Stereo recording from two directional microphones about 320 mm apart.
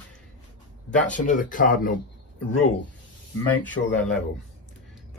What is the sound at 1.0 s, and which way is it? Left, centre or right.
Speech, left.